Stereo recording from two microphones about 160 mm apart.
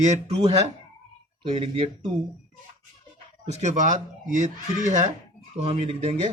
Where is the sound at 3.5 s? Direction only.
45° right (ahead or behind).